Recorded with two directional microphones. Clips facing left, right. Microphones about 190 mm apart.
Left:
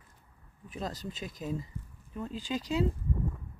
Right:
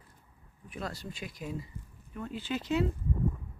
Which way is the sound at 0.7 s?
40° left (ahead or behind).